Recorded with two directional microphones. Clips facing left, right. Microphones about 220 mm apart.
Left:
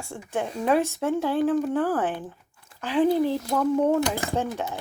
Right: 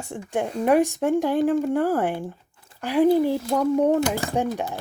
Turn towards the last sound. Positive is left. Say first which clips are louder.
# right 3 dB
turn(degrees=-15)  # may be behind; listen again after turning